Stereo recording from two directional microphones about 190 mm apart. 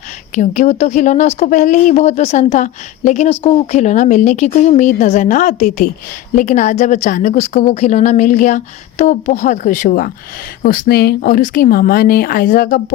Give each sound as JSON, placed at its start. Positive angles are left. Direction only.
{"t": 0.3, "sound": "speech", "side_deg": 40}